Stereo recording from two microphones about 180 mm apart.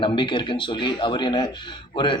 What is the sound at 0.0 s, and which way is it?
A man's voice, 25° left (ahead or behind).